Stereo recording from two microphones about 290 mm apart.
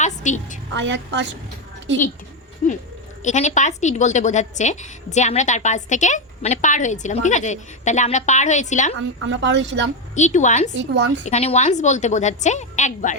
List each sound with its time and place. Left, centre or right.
0.0 s a sound: left
0.7 s speech: right
3.2 s a woman's voice: left
9.0 s speech: right
10.2 s a woman's voice: left
10.8 s speech: right
11.3 s a woman's voice: left